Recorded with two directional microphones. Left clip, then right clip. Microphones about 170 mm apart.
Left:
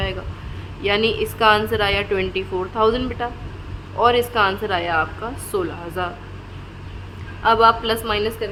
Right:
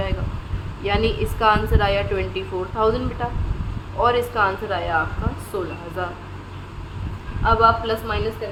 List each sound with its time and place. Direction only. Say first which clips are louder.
0.9 s a woman's voice: left 3 dB; 25° left (ahead or behind)
7.4 s a woman's voice: left 2 dB; 30° left (ahead or behind)